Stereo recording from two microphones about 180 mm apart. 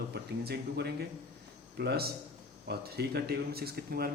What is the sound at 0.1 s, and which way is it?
Speech, 65° right (ahead or behind).